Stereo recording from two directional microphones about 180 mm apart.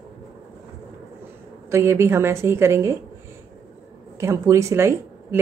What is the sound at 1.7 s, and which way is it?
A woman's voice, 15° right (ahead or behind).